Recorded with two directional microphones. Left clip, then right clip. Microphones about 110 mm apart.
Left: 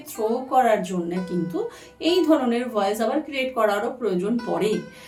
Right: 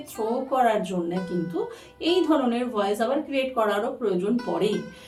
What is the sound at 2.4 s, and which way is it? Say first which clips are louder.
A woman's voice: left 2 dB; 40° left (ahead or behind).